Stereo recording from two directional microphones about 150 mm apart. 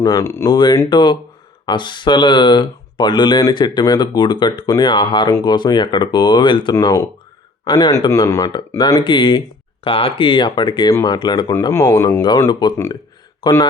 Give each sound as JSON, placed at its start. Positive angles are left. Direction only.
{"t": 0.0, "sound": "speech", "side_deg": 20}
{"t": 6.7, "sound": "speech", "side_deg": 20}
{"t": 11.7, "sound": "speech", "side_deg": 15}